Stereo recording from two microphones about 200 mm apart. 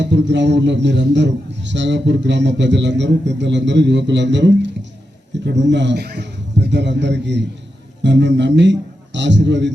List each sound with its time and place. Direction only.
0.0 s a man's voice: 60° right (ahead or behind)